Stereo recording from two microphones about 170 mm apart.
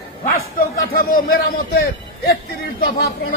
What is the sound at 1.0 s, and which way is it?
A man's voice, 60° left (ahead or behind).